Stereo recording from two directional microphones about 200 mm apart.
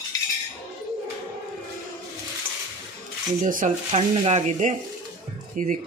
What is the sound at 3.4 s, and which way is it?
Speech, 40° right (ahead or behind).